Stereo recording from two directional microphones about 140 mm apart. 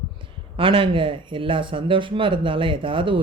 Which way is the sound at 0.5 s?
40° right (ahead or behind).